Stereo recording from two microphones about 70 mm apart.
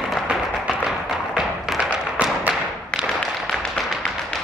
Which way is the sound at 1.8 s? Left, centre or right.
Centre.